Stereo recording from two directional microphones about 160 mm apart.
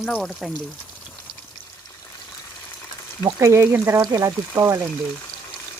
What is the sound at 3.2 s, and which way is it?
Speech, 20° right (ahead or behind).